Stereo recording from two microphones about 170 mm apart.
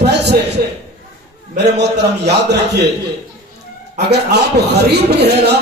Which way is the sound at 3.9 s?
75° right (ahead or behind).